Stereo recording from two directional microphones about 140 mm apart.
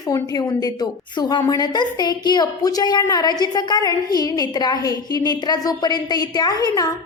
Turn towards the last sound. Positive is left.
turn(degrees=25)  # may be behind; listen again after turning